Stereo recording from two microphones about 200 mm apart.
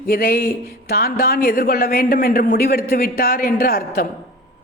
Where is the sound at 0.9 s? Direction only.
50° left (ahead or behind).